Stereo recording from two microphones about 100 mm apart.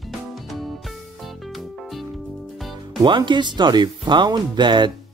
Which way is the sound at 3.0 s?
50° right (ahead or behind).